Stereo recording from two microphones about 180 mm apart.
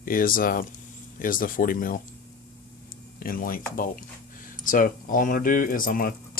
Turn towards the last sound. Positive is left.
turn(degrees=50)  # may be behind; listen again after turning